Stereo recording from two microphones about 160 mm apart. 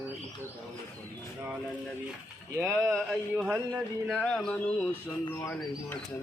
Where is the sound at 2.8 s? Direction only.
5° left (ahead or behind).